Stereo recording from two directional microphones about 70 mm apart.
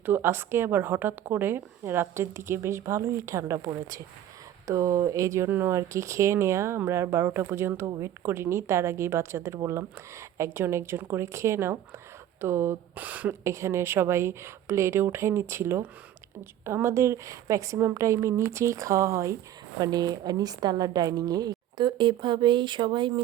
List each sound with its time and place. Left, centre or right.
0.0 s a woman's voice: right
5.5 s a woman's voice: right
5.7 s a woman's voice: right
13.0 s a woman's voice: right
13.4 s a woman's voice: right
19.8 s a woman's voice: right
22.4 s speech: right